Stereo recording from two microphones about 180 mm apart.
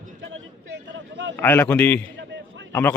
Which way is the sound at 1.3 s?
10° left (ahead or behind).